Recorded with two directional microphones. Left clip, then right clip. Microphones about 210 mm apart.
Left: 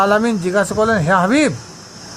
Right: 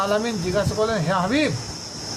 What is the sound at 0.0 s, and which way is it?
Speech, 30° left (ahead or behind).